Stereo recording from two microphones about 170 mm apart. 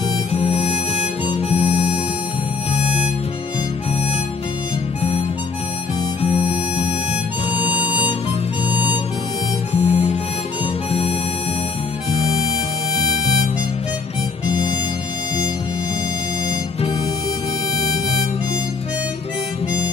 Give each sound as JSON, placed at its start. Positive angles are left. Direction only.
{"t": 0.3, "sound": "harmonica", "side_deg": 35}
{"t": 2.7, "sound": "music", "side_deg": 40}
{"t": 6.2, "sound": "harmonica", "side_deg": 35}
{"t": 9.7, "sound": "harmonica", "side_deg": 40}